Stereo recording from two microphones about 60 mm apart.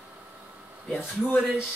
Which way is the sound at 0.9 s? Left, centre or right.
Left.